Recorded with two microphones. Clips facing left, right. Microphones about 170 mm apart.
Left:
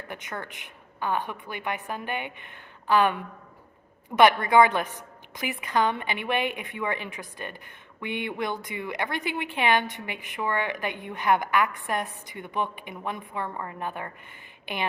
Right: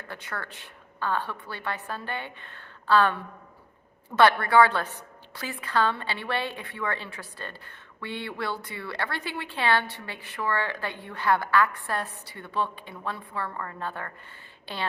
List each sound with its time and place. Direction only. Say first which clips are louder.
0.1 s a woman's voice: even; 15° left (ahead or behind)